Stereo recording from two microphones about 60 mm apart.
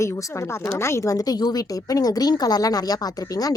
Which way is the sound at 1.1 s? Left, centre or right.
Left.